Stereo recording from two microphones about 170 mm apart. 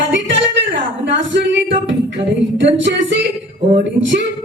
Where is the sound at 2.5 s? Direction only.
90° right.